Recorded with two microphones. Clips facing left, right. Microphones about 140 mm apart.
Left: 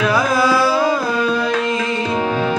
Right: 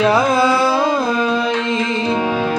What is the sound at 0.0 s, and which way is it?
Music, 25° right (ahead or behind).